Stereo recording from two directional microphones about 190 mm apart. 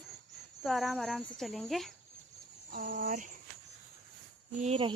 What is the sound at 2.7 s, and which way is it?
Speech, 50° right (ahead or behind).